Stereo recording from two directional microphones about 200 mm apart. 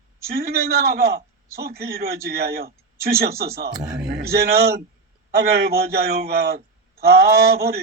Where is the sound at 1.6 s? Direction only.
50° right (ahead or behind).